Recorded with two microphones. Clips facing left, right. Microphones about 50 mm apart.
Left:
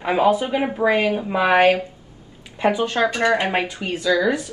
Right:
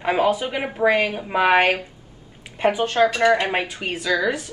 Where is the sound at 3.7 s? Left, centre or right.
Right.